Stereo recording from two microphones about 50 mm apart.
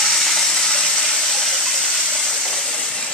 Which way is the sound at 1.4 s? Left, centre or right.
Centre.